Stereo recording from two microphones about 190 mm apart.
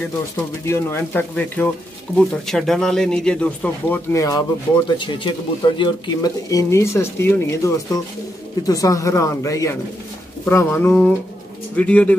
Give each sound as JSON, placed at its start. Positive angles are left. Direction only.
{"t": 0.7, "sound": "speech", "side_deg": 15}